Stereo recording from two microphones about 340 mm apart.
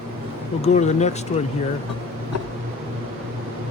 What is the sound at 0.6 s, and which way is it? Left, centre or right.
Speech, centre.